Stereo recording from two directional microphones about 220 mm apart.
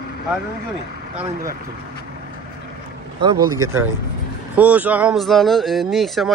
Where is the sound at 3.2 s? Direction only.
15° right (ahead or behind); by 6.3 s centre (ahead or behind).